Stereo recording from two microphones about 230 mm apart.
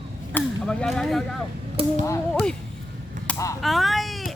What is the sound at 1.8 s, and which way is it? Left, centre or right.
Speech, right.